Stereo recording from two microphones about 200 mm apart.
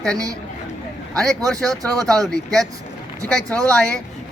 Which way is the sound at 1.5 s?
5° left (ahead or behind).